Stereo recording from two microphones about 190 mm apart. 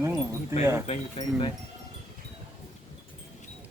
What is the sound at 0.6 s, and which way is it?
Speech, 15° right (ahead or behind).